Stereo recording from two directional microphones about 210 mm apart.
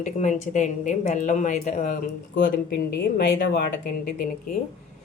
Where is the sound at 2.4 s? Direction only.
50° left (ahead or behind).